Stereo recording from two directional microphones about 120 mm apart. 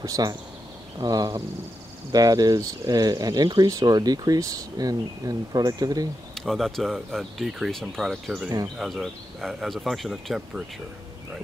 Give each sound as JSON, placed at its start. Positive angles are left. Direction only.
{"t": 0.0, "sound": "speech", "side_deg": -30}
{"t": 6.3, "sound": "speech", "side_deg": 0}